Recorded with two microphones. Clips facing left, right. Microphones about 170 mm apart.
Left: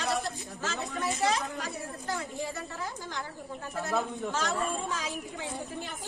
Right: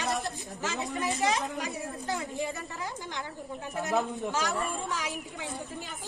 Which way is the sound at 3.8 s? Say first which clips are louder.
Right 2 dB; 15° right (ahead or behind).